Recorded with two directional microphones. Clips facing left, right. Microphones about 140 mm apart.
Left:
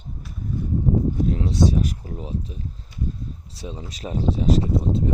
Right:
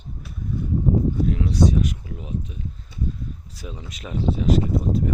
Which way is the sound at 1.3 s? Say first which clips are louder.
Even; 30° left (ahead or behind).